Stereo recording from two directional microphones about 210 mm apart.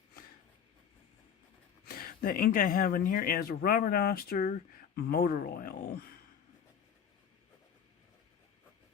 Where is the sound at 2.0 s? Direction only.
45° left (ahead or behind).